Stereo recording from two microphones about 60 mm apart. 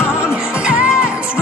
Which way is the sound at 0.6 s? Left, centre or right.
Centre.